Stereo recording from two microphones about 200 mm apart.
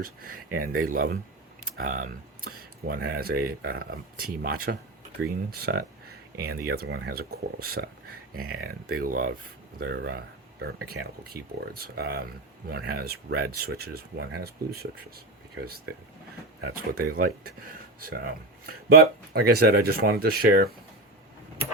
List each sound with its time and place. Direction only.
0.0 s speech: 45° right (ahead or behind)